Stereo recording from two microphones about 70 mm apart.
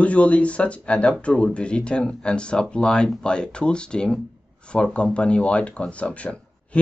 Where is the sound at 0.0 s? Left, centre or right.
Centre.